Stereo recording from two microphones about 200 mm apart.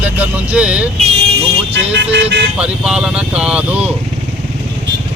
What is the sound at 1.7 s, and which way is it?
Speech, 60° right (ahead or behind).